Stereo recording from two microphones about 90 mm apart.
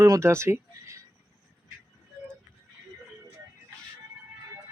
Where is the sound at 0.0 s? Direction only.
35° right (ahead or behind).